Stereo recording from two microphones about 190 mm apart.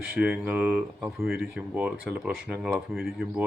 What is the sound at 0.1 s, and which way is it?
Speech, 5° right (ahead or behind).